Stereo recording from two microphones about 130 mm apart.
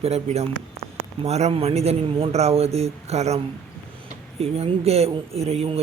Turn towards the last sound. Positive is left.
turn(degrees=-50)  # may be behind; listen again after turning